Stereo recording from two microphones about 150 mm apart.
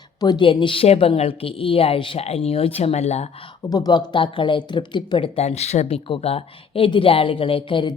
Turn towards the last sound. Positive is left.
turn(degrees=30)  # may be behind; listen again after turning